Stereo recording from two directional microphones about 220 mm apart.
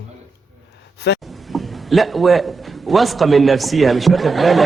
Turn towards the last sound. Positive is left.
turn(degrees=0)  # may be behind; listen again after turning